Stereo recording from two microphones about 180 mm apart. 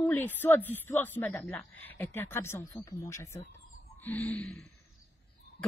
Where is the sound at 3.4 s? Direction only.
40° left (ahead or behind).